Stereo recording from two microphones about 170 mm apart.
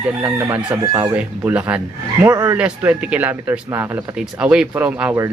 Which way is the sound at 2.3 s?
20° right (ahead or behind).